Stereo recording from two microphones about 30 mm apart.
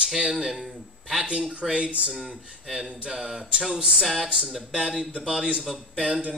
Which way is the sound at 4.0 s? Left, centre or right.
Centre.